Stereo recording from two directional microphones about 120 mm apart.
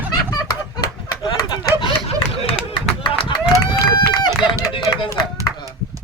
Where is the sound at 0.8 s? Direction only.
35° left (ahead or behind).